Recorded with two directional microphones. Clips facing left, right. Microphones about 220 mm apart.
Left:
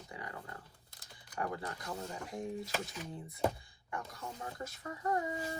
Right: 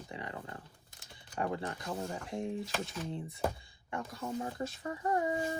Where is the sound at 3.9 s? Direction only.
25° right (ahead or behind).